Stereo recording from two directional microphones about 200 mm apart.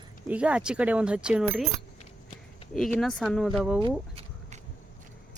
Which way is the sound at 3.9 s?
30° right (ahead or behind).